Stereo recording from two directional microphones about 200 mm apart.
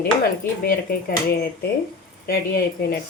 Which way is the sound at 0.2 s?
50° left (ahead or behind).